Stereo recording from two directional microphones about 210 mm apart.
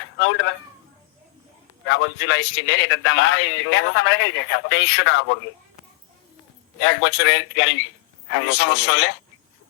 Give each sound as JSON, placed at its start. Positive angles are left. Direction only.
{"t": 0.0, "sound": "a sound", "side_deg": 65}
{"t": 1.8, "sound": "a man's voice", "side_deg": 65}
{"t": 6.7, "sound": "a man's voice", "side_deg": 65}